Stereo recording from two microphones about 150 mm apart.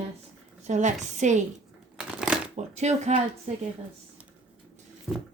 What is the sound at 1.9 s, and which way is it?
Shuffling cards, 5° right (ahead or behind).